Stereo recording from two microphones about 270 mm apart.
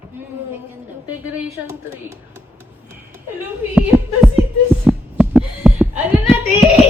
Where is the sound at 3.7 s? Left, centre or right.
Centre.